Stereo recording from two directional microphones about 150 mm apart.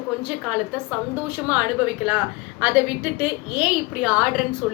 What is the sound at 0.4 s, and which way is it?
A woman's voice, 5° right (ahead or behind).